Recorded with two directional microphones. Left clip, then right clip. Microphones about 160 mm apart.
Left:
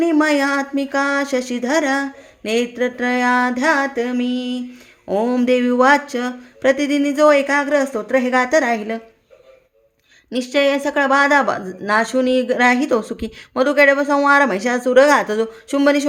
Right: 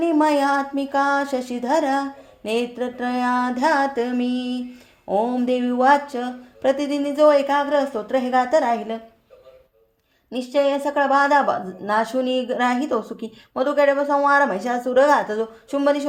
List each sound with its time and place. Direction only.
0.0 s a woman's voice: 20° left (ahead or behind)
5.0 s a woman's voice: 25° left (ahead or behind)
10.2 s a woman's voice: 25° left (ahead or behind)